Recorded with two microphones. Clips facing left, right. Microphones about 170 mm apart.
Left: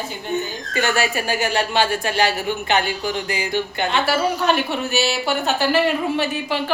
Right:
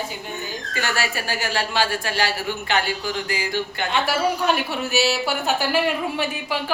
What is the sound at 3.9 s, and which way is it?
A woman's voice, 10° right (ahead or behind).